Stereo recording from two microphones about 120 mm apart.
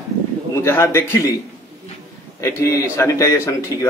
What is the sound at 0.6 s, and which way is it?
Speech, 20° left (ahead or behind).